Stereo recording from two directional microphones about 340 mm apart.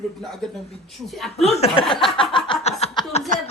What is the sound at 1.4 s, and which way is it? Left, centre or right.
Speech, centre.